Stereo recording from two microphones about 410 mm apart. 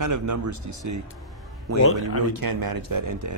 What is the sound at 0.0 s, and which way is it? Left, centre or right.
Speech, right.